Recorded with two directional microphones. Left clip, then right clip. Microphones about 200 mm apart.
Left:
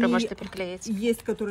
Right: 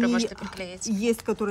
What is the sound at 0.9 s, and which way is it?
Speech, 30° right (ahead or behind).